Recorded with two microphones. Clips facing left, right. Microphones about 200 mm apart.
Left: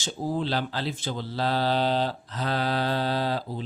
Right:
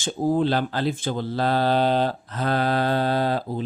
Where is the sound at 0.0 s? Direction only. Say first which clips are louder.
Right 7 dB; 50° right (ahead or behind).